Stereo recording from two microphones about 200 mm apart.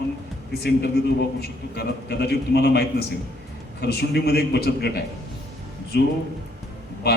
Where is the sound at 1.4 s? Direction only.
55° left (ahead or behind).